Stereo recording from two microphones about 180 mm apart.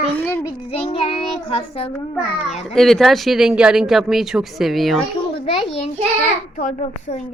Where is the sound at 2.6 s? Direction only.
Centre (ahead or behind).